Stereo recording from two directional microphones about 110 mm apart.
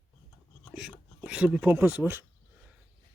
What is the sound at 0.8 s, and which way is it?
Speech, 5° right (ahead or behind).